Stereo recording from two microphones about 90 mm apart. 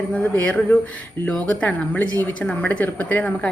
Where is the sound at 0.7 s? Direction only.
20° left (ahead or behind).